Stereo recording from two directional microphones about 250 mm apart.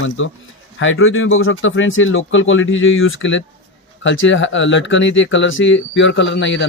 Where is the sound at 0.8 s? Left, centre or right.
Left.